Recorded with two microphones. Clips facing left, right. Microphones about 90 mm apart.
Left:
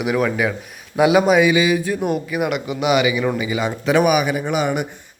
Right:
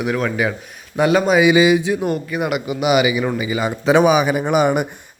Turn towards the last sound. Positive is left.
turn(degrees=-50)  # may be behind; listen again after turning